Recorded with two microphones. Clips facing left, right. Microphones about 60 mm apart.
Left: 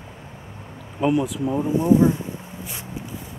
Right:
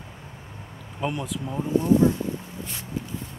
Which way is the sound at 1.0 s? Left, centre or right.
Centre.